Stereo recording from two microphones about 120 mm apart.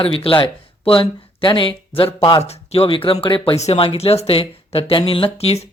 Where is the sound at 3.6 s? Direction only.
60° left (ahead or behind).